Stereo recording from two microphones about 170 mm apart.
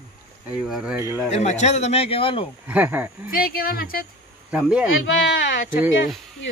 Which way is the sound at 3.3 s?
60° left (ahead or behind).